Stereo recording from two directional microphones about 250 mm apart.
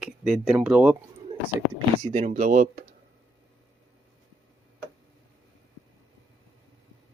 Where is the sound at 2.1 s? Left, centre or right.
Right.